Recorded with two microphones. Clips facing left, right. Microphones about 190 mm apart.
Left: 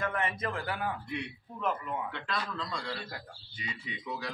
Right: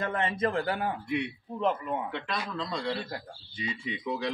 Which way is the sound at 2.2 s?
10° right (ahead or behind).